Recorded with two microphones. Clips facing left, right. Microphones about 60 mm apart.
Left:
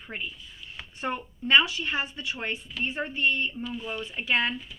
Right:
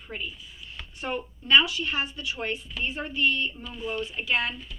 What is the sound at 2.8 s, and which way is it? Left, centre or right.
A woman's voice, left.